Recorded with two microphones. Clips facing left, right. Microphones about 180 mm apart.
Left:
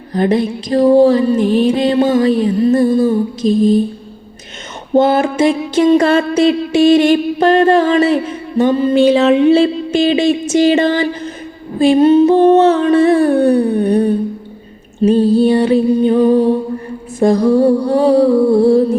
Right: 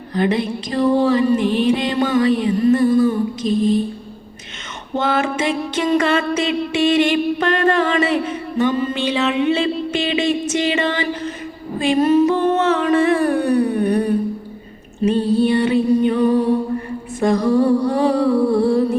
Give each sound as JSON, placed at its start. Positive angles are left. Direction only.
{"t": 0.1, "sound": "music", "side_deg": 40}
{"t": 4.9, "sound": "music", "side_deg": 40}
{"t": 13.1, "sound": "a sound", "side_deg": 25}
{"t": 15.0, "sound": "music", "side_deg": 35}